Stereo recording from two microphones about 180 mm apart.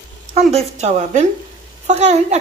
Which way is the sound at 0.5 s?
35° right (ahead or behind).